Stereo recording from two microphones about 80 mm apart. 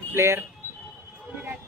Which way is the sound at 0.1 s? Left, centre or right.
Right.